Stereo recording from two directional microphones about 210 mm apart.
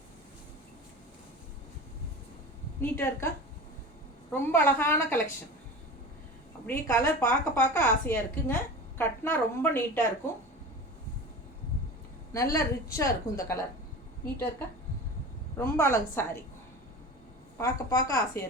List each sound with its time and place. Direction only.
2.8 s a woman's voice: 10° left (ahead or behind)
4.3 s a woman's voice: 10° left (ahead or behind)
6.7 s a woman's voice: 10° left (ahead or behind)
12.3 s a woman's voice: 15° left (ahead or behind)
15.5 s a woman's voice: 10° left (ahead or behind)
17.6 s a woman's voice: 15° left (ahead or behind)